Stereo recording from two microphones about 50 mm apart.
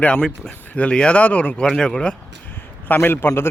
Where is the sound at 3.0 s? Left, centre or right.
Left.